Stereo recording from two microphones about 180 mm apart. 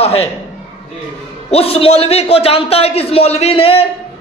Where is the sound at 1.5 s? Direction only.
35° left (ahead or behind).